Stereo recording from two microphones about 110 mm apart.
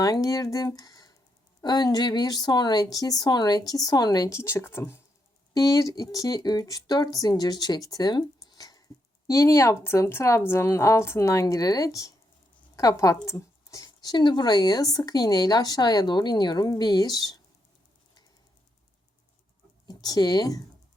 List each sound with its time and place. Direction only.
0.0 s speech: 35° left (ahead or behind)
4.3 s speech: 25° left (ahead or behind)
5.5 s speech: 35° left (ahead or behind)
19.9 s speech: 35° left (ahead or behind)